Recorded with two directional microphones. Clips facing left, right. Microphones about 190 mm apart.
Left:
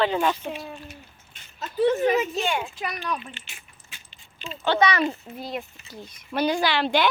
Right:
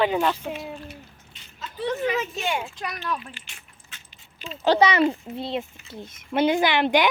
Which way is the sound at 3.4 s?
10° left (ahead or behind).